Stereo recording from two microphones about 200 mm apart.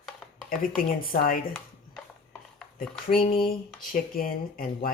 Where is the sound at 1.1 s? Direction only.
45° left (ahead or behind).